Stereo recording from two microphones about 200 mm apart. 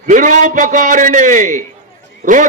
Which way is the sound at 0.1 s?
40° right (ahead or behind).